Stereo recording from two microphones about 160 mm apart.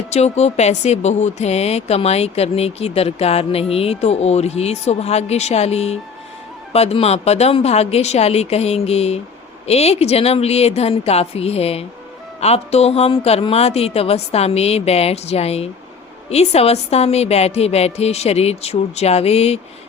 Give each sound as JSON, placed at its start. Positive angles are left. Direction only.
{"t": 0.1, "sound": "speech", "side_deg": 45}